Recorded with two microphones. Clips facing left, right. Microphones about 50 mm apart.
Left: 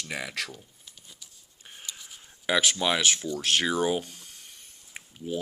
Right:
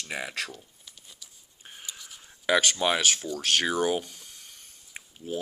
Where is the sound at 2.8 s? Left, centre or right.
Centre.